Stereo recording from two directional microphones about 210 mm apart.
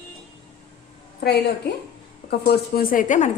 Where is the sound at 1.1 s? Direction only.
50° left (ahead or behind).